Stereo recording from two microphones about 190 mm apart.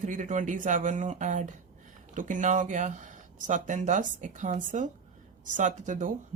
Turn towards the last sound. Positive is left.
turn(degrees=-40)  # may be behind; listen again after turning